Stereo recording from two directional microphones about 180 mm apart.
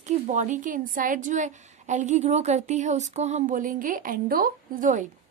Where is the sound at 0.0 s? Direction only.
40° right (ahead or behind).